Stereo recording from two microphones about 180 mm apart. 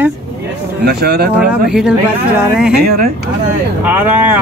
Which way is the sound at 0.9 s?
60° right (ahead or behind).